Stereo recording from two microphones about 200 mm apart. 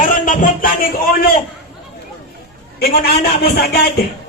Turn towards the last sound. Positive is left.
turn(degrees=50)  # may be behind; listen again after turning